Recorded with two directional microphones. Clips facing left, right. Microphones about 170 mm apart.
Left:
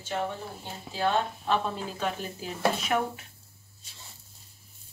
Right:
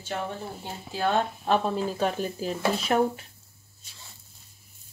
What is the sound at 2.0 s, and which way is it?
Speech, 40° right (ahead or behind).